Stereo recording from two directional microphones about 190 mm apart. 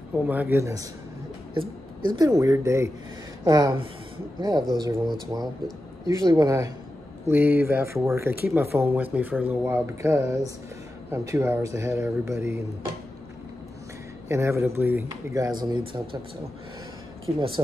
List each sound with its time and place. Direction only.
0.3 s speech: 10° right (ahead or behind)
2.0 s speech: 20° right (ahead or behind)
14.3 s speech: 15° right (ahead or behind)